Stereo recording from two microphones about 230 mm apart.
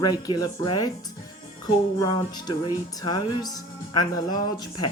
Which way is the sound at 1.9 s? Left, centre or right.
Centre.